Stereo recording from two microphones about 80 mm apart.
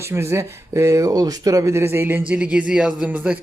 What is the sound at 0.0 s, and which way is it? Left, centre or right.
Speech, right.